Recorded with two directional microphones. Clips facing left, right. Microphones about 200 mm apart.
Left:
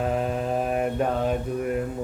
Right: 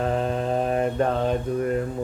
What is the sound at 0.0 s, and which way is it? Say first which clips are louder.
Mantra: right 1 dB; 5° left (ahead or behind).